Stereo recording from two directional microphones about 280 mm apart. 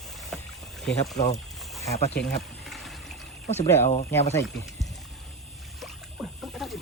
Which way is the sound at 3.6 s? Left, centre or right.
Centre.